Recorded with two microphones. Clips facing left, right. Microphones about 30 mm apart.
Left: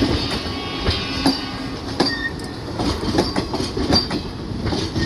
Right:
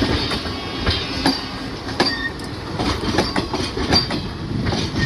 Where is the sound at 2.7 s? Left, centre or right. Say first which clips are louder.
Even; right.